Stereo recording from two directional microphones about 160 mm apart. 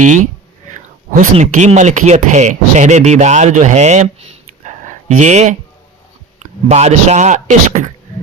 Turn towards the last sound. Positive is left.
turn(degrees=-50)  # may be behind; listen again after turning